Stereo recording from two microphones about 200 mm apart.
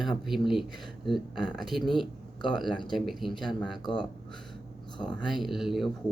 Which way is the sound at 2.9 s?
Centre (ahead or behind).